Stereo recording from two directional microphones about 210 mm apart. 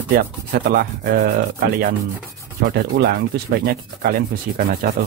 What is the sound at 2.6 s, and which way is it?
Rub, 50° right (ahead or behind).